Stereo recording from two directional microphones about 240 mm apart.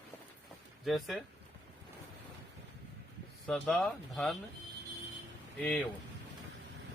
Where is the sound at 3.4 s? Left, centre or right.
Centre.